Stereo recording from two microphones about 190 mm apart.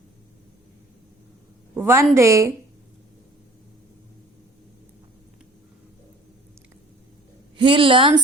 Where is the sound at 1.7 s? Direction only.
15° right (ahead or behind).